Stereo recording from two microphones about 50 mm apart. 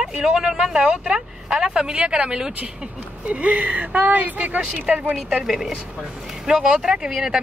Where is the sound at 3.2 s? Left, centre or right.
Right.